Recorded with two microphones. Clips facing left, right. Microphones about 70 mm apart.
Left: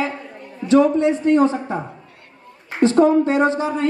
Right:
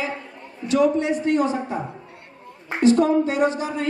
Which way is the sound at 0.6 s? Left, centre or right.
Left.